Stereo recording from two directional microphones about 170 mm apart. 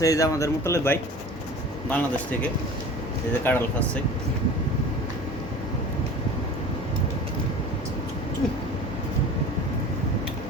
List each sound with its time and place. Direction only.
0.0 s speech: 20° left (ahead or behind)